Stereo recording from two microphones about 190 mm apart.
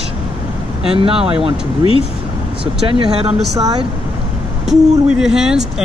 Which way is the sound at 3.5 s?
20° right (ahead or behind).